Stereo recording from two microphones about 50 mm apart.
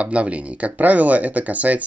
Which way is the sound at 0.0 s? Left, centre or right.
Right.